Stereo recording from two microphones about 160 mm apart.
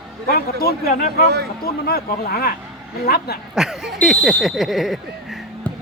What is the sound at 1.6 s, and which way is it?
Speech, 70° left (ahead or behind).